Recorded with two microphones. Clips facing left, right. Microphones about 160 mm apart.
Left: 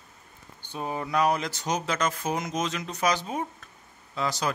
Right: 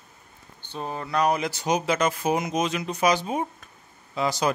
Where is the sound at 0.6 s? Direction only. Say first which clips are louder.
Even; 10° left (ahead or behind).